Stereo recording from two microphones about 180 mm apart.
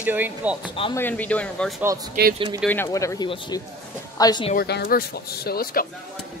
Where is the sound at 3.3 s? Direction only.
30° left (ahead or behind).